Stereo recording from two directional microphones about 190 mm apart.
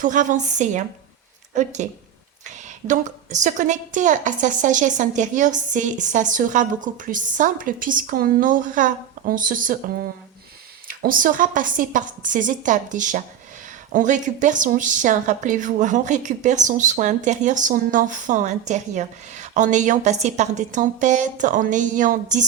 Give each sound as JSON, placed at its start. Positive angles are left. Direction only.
{"t": 0.0, "sound": "a woman's voice", "side_deg": -45}